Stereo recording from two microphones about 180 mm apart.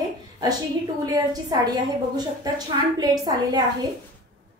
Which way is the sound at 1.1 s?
20° right (ahead or behind).